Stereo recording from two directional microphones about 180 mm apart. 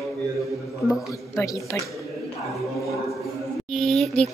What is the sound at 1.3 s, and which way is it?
Speech, 20° left (ahead or behind).